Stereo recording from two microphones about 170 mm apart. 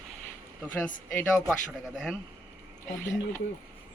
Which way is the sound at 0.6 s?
10° left (ahead or behind).